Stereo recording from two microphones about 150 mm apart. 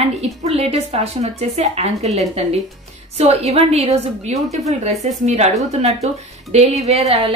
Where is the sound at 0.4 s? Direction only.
45° right (ahead or behind).